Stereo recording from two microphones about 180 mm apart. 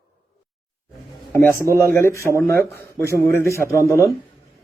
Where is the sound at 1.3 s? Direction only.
15° left (ahead or behind).